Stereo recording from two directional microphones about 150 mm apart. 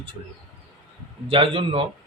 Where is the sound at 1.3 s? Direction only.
35° right (ahead or behind).